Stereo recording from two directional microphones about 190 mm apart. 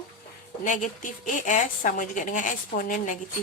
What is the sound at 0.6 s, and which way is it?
A woman's voice, 40° left (ahead or behind).